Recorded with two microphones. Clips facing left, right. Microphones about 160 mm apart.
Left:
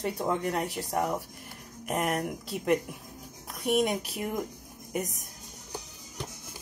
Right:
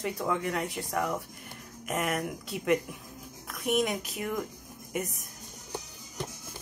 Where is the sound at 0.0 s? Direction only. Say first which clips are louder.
Left 1 dB; 35° left (ahead or behind).